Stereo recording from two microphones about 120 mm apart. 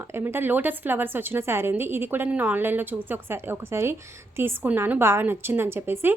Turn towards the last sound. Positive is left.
turn(degrees=-20)  # may be behind; listen again after turning